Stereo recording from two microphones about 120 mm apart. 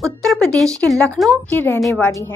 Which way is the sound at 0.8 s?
5° left (ahead or behind).